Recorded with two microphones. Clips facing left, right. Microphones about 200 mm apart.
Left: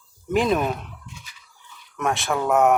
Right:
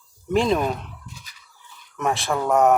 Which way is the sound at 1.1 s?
40° right (ahead or behind).